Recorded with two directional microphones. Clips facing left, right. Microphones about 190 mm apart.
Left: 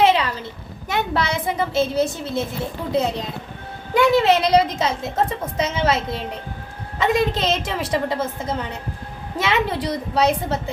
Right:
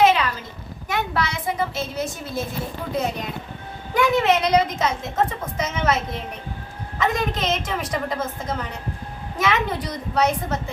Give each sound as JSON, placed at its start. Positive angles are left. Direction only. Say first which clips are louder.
{"t": 0.0, "sound": "a sound", "louder": "left 1 dB", "side_deg": 30}
{"t": 0.9, "sound": "a woman's voice", "louder": "left 3 dB", "side_deg": 25}
{"t": 3.9, "sound": "a woman's voice", "louder": "left 3 dB", "side_deg": 30}